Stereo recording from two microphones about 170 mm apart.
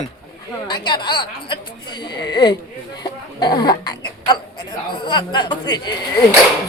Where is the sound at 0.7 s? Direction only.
25° left (ahead or behind).